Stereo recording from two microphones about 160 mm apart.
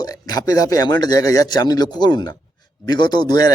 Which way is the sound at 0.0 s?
25° left (ahead or behind).